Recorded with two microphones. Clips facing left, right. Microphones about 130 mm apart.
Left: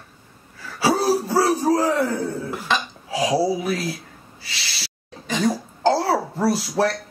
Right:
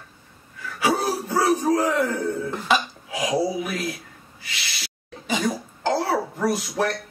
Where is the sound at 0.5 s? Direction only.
30° left (ahead or behind).